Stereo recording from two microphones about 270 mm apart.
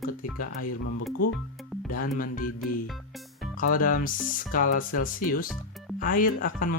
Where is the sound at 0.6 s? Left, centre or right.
Left.